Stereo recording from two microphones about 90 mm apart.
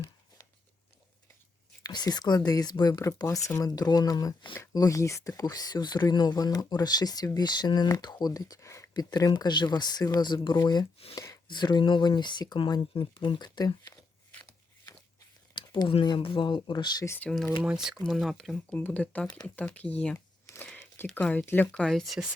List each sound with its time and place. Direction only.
1.8 s speech: 50° left (ahead or behind)
3.2 s speech: 35° left (ahead or behind)
8.9 s speech: 45° left (ahead or behind)
11.1 s speech: 35° left (ahead or behind)
11.4 s speech: 55° left (ahead or behind)
12.9 s speech: 75° left (ahead or behind); by 14.0 s 45° left (ahead or behind)
15.5 s speech: 65° left (ahead or behind)
17.6 s speech: 5° right (ahead or behind)
18.5 s speech: 15° left (ahead or behind)
20.7 s a sound: 25° left (ahead or behind)
21.2 s speech: 20° left (ahead or behind)
21.8 s speech: centre (ahead or behind)